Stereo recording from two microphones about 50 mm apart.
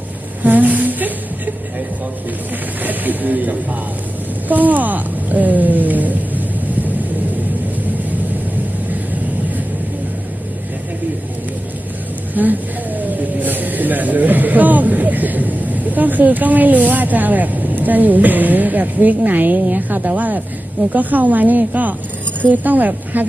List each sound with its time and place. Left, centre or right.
0.4 s a sound: right
2.8 s speech: right
12.3 s vehicle: right
20.9 s a woman's voice: right